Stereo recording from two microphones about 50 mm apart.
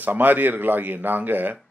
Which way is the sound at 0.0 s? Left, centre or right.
Right.